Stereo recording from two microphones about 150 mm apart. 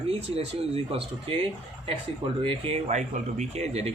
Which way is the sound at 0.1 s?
40° right (ahead or behind).